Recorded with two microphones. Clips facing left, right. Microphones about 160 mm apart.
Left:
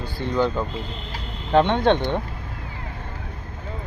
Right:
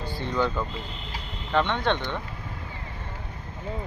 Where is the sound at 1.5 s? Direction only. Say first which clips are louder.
Left 7 dB; 40° left (ahead or behind).